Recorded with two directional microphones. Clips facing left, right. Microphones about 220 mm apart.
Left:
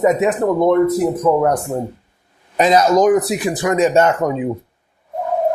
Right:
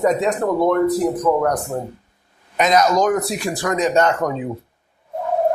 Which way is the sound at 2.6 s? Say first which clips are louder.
Left 3 dB; 30° left (ahead or behind).